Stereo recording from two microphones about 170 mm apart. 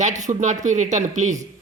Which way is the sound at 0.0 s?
45° right (ahead or behind).